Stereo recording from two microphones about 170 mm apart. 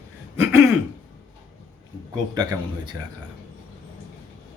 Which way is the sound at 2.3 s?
20° right (ahead or behind).